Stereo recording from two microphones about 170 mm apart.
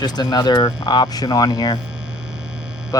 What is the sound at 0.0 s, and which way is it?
Speech, 25° left (ahead or behind).